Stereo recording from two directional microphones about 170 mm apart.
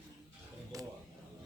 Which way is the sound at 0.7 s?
20° right (ahead or behind).